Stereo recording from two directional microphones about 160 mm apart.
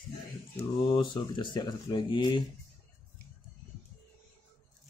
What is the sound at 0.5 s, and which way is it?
Speech, 35° left (ahead or behind).